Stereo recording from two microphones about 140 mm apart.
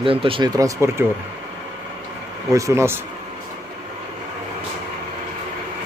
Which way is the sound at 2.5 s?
20° right (ahead or behind).